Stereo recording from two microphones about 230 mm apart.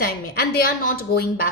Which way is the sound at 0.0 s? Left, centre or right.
Left.